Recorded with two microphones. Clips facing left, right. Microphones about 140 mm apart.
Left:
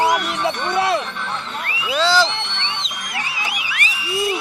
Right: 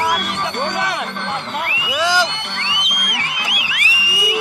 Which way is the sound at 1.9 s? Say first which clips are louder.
Left 1 dB; 15° right (ahead or behind).